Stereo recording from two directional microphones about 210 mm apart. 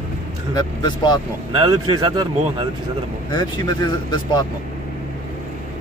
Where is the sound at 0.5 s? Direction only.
20° left (ahead or behind).